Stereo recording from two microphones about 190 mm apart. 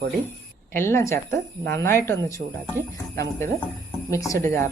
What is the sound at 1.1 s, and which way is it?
Speech, 55° right (ahead or behind).